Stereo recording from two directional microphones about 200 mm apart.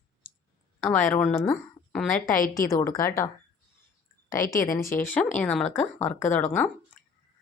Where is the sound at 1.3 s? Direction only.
10° left (ahead or behind).